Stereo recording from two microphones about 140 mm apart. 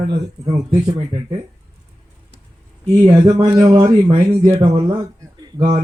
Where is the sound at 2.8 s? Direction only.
30° right (ahead or behind).